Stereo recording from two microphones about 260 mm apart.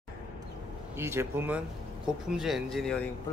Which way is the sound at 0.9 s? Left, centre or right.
Centre.